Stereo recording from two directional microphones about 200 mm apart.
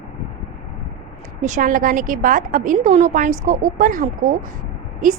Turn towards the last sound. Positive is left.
turn(degrees=-40)  # may be behind; listen again after turning